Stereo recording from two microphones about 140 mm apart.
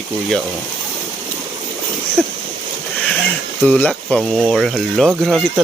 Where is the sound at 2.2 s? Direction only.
5° left (ahead or behind).